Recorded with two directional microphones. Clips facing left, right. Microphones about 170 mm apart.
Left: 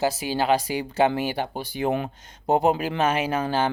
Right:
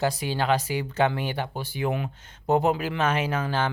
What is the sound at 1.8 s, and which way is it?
Speech, 35° left (ahead or behind).